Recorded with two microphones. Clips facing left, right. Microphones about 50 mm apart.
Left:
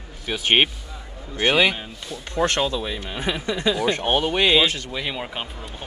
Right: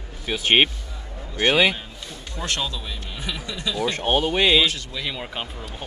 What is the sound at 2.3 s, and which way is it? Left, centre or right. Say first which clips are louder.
Speech: left 7 dB; left.